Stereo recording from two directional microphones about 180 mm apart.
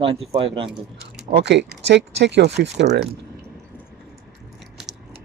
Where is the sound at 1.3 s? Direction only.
70° right (ahead or behind).